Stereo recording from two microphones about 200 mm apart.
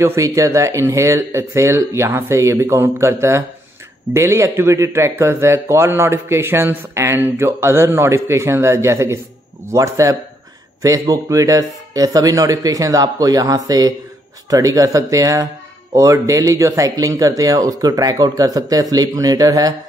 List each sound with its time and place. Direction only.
0.0 s speech: 15° right (ahead or behind)